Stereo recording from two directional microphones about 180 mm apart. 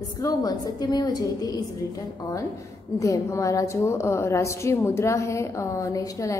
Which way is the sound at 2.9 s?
20° left (ahead or behind).